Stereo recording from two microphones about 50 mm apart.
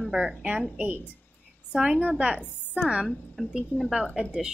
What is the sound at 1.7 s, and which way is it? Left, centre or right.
A woman's voice, centre.